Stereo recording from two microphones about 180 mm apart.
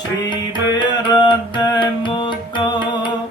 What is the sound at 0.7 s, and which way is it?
Music, 20° left (ahead or behind).